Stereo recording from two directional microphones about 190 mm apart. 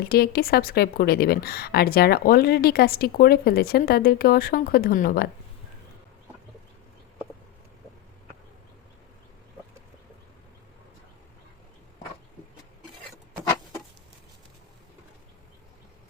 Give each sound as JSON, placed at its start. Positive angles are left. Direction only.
{"t": 0.0, "sound": "a woman's voice", "side_deg": 55}